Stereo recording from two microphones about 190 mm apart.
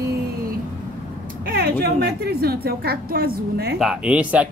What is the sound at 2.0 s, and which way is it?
A woman's voice, 55° right (ahead or behind).